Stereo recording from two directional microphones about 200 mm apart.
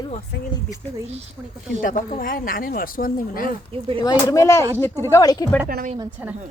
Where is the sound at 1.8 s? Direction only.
40° left (ahead or behind).